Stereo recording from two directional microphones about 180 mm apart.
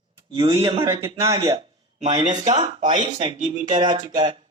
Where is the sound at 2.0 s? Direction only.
40° right (ahead or behind).